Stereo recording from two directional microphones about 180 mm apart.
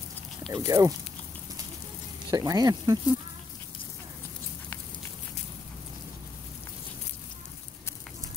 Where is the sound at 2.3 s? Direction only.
20° right (ahead or behind).